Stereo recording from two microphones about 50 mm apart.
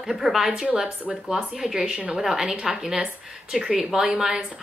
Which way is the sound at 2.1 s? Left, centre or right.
Centre.